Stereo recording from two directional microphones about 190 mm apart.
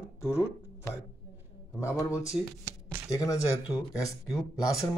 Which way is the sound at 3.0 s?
15° left (ahead or behind).